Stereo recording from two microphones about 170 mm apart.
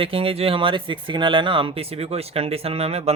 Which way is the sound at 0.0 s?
35° right (ahead or behind).